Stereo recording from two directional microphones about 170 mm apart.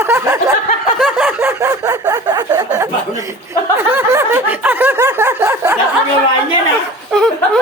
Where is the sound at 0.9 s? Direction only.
5° right (ahead or behind).